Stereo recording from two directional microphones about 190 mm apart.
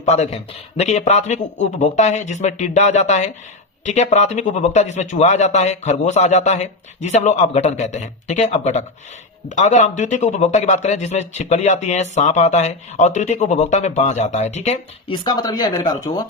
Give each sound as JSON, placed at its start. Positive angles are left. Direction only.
{"t": 0.0, "sound": "speech", "side_deg": 35}